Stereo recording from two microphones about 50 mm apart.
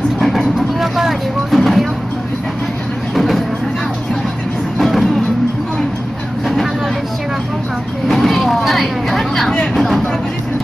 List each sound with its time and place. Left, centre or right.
0.2 s vehicle: centre
3.2 s a sound: centre
4.7 s vehicle: centre
6.4 s vehicle: centre
8.1 s vehicle: centre
9.8 s a sound: centre